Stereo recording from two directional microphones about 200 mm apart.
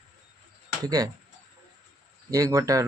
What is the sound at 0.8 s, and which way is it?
Speech, 20° right (ahead or behind).